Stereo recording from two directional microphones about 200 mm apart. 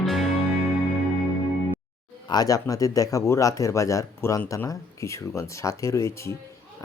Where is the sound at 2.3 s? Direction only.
20° left (ahead or behind).